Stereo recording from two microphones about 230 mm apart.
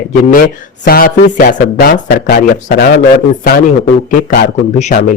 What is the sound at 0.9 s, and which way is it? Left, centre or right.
Speech, left.